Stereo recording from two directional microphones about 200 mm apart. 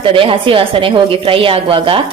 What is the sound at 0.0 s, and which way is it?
Speech, 25° right (ahead or behind).